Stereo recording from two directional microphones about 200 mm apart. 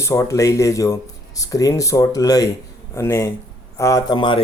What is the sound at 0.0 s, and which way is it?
Speech, 15° left (ahead or behind).